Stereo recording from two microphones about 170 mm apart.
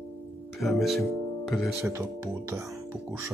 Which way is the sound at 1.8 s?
15° right (ahead or behind).